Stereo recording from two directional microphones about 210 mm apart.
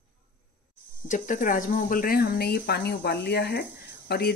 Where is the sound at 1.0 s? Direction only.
40° left (ahead or behind).